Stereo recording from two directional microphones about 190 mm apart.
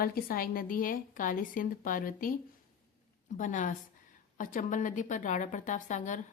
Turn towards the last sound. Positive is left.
turn(degrees=40)  # may be behind; listen again after turning